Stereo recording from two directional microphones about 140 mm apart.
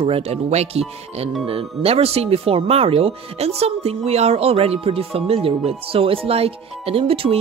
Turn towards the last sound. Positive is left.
turn(degrees=-40)  # may be behind; listen again after turning